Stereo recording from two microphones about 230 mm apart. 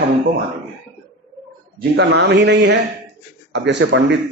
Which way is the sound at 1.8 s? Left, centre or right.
Right.